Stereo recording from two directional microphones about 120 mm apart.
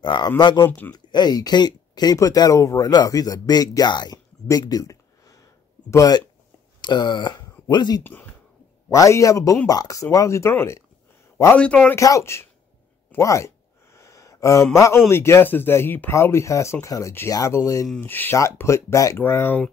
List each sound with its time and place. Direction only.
0.0 s speech: 40° left (ahead or behind)
0.7 s speech: 15° left (ahead or behind)
0.9 s speech: 35° left (ahead or behind)
8.0 s speech: 15° left (ahead or behind)
8.9 s speech: 25° left (ahead or behind)
11.5 s speech: 10° left (ahead or behind)
11.9 s speech: 25° left (ahead or behind)